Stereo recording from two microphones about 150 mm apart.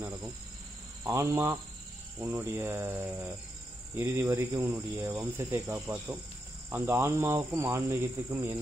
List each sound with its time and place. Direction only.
0.0 s a sound: 10° right (ahead or behind)
1.0 s speech: 20° right (ahead or behind)
2.1 s cricket: 15° right (ahead or behind)
6.7 s speech: 15° right (ahead or behind)